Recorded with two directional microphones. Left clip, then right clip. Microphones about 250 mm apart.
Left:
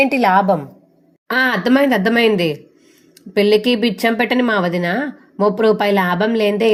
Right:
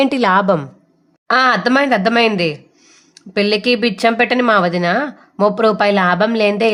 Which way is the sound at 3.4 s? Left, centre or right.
Centre.